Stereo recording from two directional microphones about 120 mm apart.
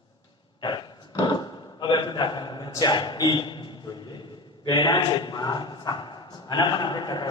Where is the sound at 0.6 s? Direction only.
40° left (ahead or behind).